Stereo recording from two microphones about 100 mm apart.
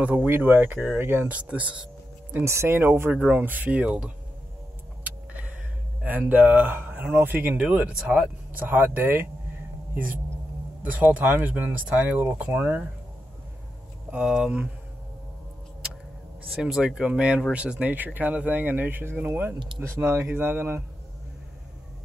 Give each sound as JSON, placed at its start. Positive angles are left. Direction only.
{"t": 0.0, "sound": "speech", "side_deg": -15}
{"t": 2.3, "sound": "speech", "side_deg": -25}
{"t": 5.0, "sound": "vehicle", "side_deg": -15}
{"t": 6.0, "sound": "speech", "side_deg": -15}
{"t": 8.5, "sound": "speech", "side_deg": -20}
{"t": 10.9, "sound": "speech", "side_deg": -15}
{"t": 14.1, "sound": "speech", "side_deg": -10}
{"t": 16.6, "sound": "speech", "side_deg": -5}